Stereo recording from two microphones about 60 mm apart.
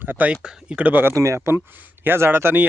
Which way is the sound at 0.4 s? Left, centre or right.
Centre.